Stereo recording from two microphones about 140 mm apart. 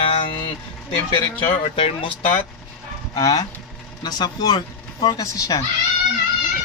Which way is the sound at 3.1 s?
25° left (ahead or behind).